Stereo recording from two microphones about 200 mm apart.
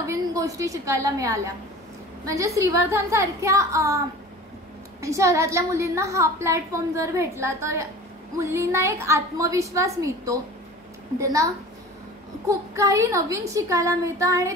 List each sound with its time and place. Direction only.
0.0 s a woman's voice: 15° right (ahead or behind)
5.0 s a woman's voice: 15° right (ahead or behind)